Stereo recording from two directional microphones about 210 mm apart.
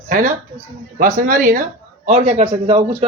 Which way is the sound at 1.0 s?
40° right (ahead or behind).